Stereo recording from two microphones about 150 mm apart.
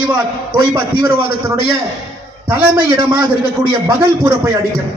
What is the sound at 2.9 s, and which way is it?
A man's voice, 25° right (ahead or behind).